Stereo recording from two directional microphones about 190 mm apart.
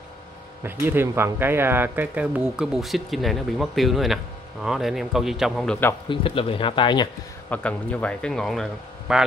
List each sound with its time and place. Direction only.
0.7 s speech: 10° right (ahead or behind)
6.0 s speech: 25° left (ahead or behind)
7.4 s speech: 10° left (ahead or behind)